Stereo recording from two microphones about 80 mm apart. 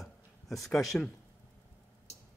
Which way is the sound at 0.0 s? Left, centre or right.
Centre.